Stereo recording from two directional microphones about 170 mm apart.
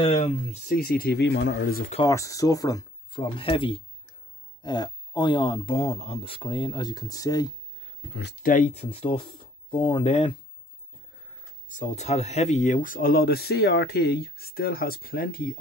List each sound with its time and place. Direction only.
0.0 s speech: 35° left (ahead or behind)
0.7 s speech: 60° left (ahead or behind); by 1.8 s 90° left
2.0 s speech: 20° left (ahead or behind)
8.2 s speech: 80° left
8.5 s speech: 45° left (ahead or behind)
11.7 s speech: 45° left (ahead or behind)